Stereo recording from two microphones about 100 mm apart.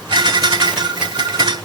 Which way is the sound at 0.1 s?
45° right (ahead or behind).